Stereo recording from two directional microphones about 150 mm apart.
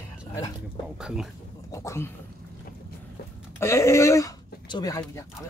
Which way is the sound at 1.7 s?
20° left (ahead or behind).